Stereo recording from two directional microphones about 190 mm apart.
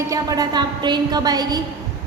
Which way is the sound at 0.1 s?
20° right (ahead or behind).